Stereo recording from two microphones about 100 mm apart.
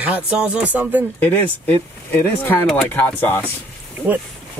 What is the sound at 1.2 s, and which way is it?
Speech, 20° left (ahead or behind).